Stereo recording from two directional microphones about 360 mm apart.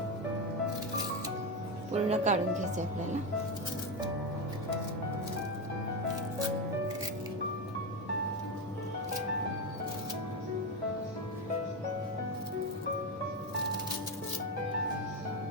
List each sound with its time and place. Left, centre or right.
1.9 s speech: centre